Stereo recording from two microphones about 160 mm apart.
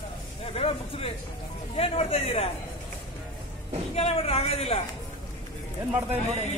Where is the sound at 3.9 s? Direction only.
40° left (ahead or behind).